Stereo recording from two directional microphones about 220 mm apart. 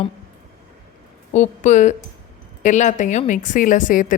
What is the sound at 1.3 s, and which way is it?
A woman's voice, 35° left (ahead or behind).